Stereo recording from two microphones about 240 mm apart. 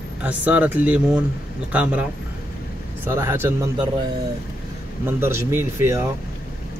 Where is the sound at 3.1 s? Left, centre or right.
Centre.